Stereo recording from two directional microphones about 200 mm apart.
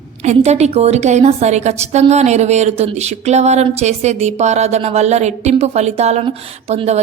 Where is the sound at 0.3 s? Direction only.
35° right (ahead or behind).